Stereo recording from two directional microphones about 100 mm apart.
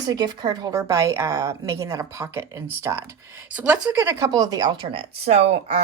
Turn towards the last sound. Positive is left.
turn(degrees=-90)